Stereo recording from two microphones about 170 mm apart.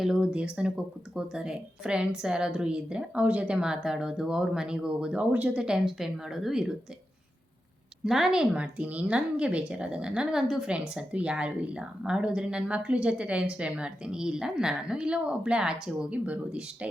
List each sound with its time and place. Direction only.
0.0 s speech: 5° right (ahead or behind)
8.0 s speech: centre (ahead or behind)